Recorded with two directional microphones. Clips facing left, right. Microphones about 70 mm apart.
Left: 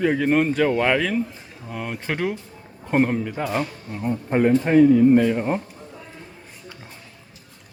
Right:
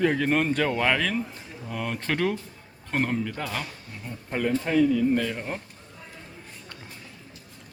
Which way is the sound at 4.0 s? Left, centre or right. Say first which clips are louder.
Left 10 dB; left.